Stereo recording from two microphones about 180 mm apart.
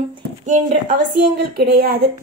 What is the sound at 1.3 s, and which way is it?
Speech, 65° right (ahead or behind).